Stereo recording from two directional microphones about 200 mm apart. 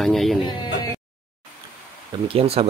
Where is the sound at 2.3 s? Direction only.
30° right (ahead or behind).